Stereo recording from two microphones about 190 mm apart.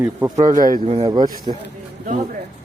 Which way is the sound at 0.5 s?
45° right (ahead or behind).